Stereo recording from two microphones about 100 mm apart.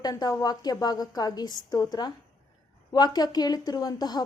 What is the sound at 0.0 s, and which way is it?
A woman's voice, 40° left (ahead or behind).